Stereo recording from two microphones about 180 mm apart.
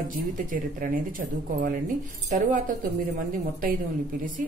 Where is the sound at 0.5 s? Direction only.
50° right (ahead or behind).